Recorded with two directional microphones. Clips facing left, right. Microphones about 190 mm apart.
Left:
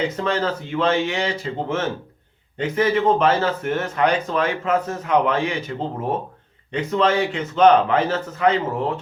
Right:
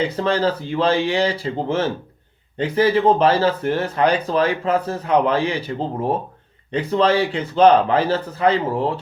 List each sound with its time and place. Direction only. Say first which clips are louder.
0.0 s speech: right 3 dB; 35° right (ahead or behind)